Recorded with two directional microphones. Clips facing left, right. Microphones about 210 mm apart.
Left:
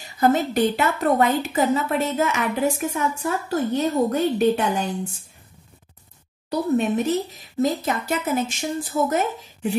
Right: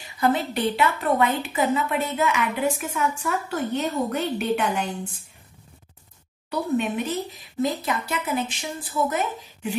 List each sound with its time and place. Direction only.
0.0 s a woman's voice: 45° left (ahead or behind)
6.5 s speech: 40° left (ahead or behind)